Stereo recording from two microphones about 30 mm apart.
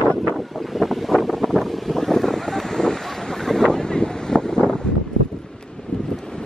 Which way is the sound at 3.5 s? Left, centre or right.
Centre.